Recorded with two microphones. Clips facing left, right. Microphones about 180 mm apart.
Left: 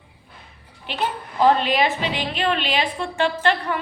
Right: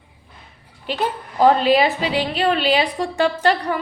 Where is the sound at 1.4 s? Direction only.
35° right (ahead or behind).